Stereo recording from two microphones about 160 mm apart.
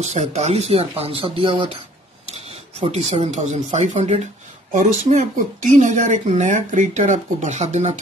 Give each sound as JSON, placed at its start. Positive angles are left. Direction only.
{"t": 0.0, "sound": "speech", "side_deg": -45}